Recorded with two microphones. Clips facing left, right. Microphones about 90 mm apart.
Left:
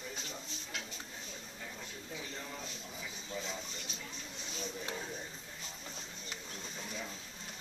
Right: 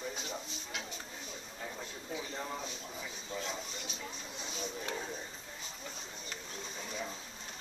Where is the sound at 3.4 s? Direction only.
5° right (ahead or behind).